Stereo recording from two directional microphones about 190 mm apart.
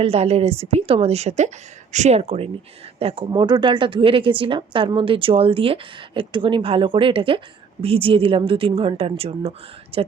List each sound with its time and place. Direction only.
0.0 s a woman's voice: 30° right (ahead or behind)